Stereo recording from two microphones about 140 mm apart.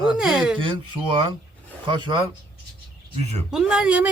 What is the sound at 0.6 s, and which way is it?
Speech, 35° right (ahead or behind).